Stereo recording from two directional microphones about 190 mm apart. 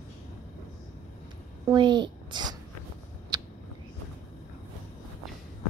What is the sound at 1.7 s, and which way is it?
Speech, 25° right (ahead or behind).